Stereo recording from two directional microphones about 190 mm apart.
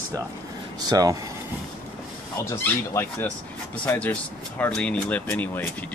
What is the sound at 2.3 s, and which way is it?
Speech, 15° left (ahead or behind).